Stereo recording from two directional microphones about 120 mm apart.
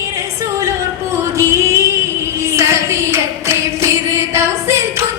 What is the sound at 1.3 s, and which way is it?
Music, 25° right (ahead or behind).